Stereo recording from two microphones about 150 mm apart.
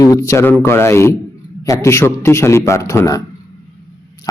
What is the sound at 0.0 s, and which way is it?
A man's voice, 20° left (ahead or behind).